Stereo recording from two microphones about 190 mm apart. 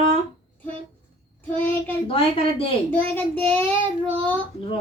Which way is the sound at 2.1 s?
30° left (ahead or behind).